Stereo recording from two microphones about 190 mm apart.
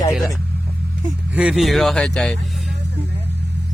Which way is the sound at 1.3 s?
5° right (ahead or behind).